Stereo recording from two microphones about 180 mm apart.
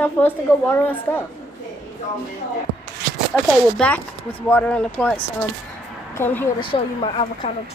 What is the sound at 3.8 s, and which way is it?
A woman's voice, 10° left (ahead or behind).